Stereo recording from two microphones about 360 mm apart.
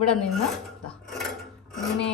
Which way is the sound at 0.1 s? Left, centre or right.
Centre.